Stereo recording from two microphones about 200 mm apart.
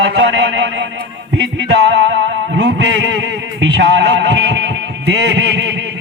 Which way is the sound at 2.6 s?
60° right (ahead or behind).